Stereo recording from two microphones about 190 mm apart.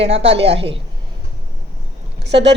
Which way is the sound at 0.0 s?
30° right (ahead or behind).